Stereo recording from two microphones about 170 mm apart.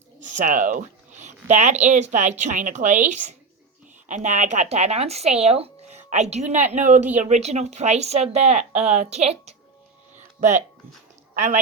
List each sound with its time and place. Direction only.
0.2 s speech: 45° right (ahead or behind)
11.3 s a woman's voice: 45° right (ahead or behind)